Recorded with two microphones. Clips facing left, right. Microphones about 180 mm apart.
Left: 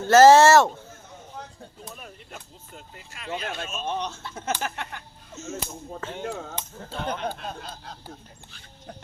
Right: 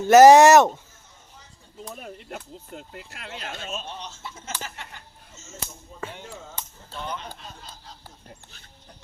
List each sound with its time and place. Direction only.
0.1 s speech: 15° right (ahead or behind)
1.4 s a sound: 65° left (ahead or behind)
2.9 s speech: 60° right (ahead or behind)
3.4 s speech: 60° left (ahead or behind)